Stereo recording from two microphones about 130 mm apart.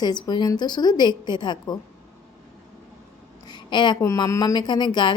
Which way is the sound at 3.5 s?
35° left (ahead or behind).